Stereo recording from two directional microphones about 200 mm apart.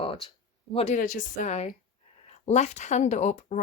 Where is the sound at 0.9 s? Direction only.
40° left (ahead or behind).